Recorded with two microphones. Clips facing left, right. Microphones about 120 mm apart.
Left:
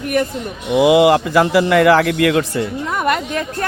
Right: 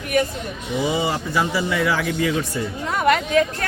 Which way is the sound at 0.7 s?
85° left.